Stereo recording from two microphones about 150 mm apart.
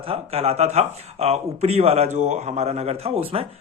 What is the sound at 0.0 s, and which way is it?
Speech, 40° right (ahead or behind).